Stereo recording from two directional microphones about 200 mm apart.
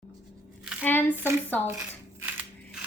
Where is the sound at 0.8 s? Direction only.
10° left (ahead or behind).